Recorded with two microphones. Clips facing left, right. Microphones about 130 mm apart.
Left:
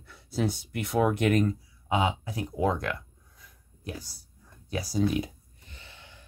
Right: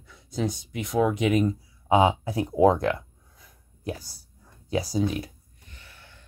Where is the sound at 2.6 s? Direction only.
30° right (ahead or behind).